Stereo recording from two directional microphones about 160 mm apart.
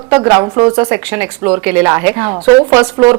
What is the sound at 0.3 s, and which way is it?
Speech, 15° right (ahead or behind).